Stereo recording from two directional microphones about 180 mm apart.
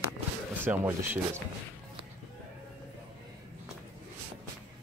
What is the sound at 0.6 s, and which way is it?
Speech, 10° right (ahead or behind).